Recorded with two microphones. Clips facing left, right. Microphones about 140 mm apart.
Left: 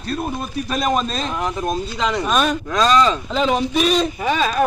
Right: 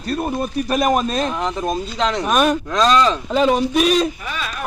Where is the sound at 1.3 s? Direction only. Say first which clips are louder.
Right 1 dB; 5° left (ahead or behind).